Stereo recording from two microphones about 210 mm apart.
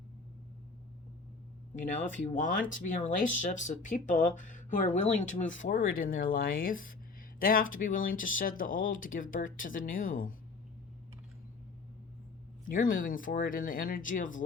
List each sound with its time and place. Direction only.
2.3 s speech: 40° left (ahead or behind)
12.6 s speech: 40° left (ahead or behind)